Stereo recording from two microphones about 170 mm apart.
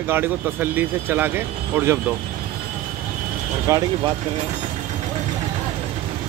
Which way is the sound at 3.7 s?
20° right (ahead or behind).